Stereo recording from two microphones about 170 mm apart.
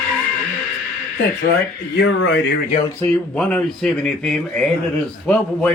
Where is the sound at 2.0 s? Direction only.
90° left.